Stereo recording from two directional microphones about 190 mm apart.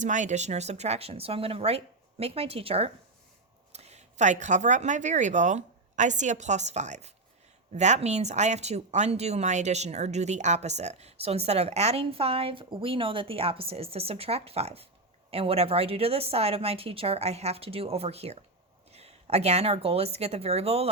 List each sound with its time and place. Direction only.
0.0 s speech: 40° right (ahead or behind)